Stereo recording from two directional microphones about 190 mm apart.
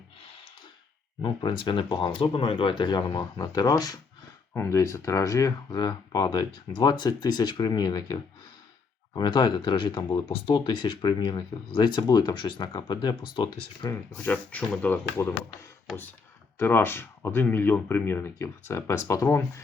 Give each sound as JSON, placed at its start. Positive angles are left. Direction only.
{"t": 1.2, "sound": "speech", "side_deg": 25}
{"t": 13.9, "sound": "speech", "side_deg": 15}
{"t": 16.6, "sound": "speech", "side_deg": 10}